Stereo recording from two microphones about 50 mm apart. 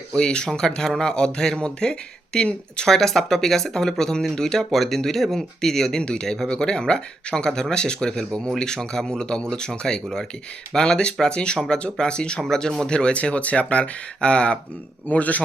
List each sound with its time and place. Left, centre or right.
0.1 s speech: centre
15.0 s a man's voice: left